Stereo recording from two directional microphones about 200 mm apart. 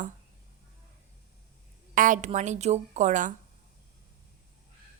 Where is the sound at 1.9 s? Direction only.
40° right (ahead or behind).